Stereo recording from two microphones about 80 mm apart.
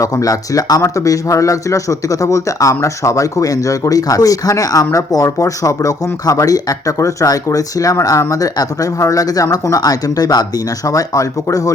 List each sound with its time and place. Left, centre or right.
0.0 s speech: left